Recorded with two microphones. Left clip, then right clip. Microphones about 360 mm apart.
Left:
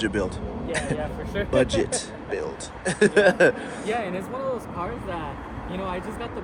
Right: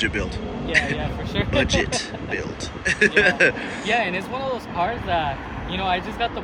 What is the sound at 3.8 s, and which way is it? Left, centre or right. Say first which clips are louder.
Speech: right 6 dB; centre.